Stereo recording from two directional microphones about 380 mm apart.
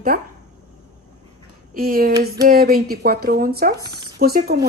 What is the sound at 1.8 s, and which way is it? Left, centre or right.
A woman's voice, right.